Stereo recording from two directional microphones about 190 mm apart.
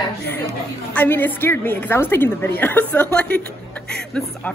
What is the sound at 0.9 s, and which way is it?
A woman's voice, 10° left (ahead or behind).